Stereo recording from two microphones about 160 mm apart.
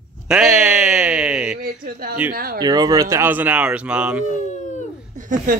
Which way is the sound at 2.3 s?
65° right (ahead or behind).